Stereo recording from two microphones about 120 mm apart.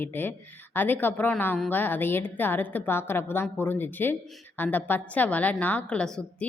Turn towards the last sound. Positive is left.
turn(degrees=5)  # may be behind; listen again after turning